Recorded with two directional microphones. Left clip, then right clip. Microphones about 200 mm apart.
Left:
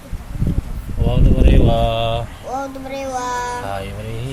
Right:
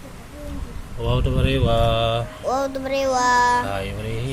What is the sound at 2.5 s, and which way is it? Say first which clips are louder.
Speech: right 3 dB; 55° right (ahead or behind).